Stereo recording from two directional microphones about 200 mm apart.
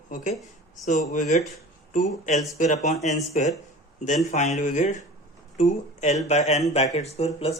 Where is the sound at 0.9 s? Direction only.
40° left (ahead or behind).